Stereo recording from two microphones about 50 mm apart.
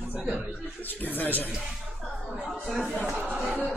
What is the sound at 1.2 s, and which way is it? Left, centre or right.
Speech, left.